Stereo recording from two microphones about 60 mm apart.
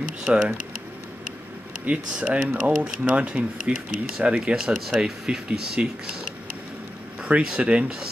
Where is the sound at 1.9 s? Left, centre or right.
Centre.